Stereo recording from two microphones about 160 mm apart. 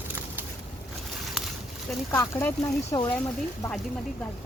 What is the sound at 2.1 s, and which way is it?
Speech, 15° left (ahead or behind).